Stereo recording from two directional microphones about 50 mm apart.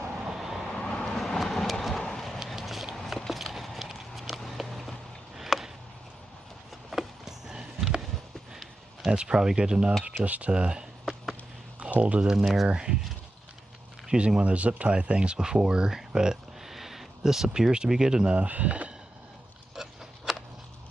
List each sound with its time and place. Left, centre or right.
0.3 s vehicle: centre
0.7 s vehicle: centre
2.4 s a sound: centre
3.1 s walk: centre
5.3 s chop: centre
6.9 s a sound: centre
9.0 s speech: centre
10.2 s speech: right
10.5 s a sound: centre
11.8 s speech: right
14.1 s speech: centre
18.3 s speech: right
19.7 s a sound: centre